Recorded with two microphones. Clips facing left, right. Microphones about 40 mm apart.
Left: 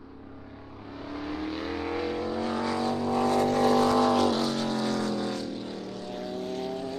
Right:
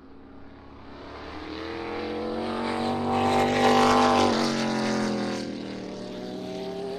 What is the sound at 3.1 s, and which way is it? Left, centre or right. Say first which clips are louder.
Vehicle: right 2 dB; right.